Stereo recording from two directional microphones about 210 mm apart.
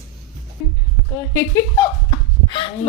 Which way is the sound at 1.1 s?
15° left (ahead or behind).